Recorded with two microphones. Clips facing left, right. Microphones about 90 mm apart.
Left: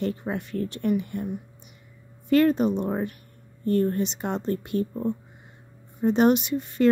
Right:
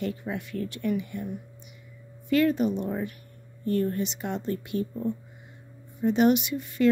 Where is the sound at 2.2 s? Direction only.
40° left (ahead or behind).